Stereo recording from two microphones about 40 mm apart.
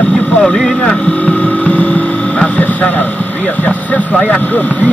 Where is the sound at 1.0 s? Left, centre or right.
Left.